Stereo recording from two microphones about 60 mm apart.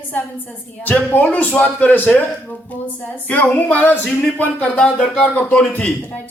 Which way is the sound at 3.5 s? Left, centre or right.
Left.